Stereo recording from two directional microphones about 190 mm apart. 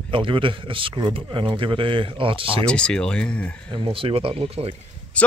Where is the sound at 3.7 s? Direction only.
25° right (ahead or behind).